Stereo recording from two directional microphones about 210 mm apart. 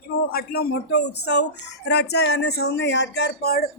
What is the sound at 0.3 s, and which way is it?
Speech, 45° left (ahead or behind).